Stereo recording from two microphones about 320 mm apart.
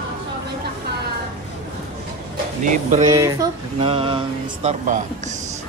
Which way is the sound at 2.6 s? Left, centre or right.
Right.